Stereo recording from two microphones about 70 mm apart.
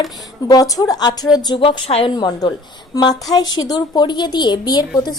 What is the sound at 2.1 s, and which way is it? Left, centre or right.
Speech, left.